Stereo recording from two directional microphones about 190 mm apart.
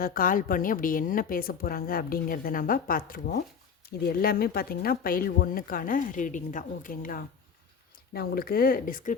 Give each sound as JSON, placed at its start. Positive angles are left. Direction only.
{"t": 0.0, "sound": "speech", "side_deg": 50}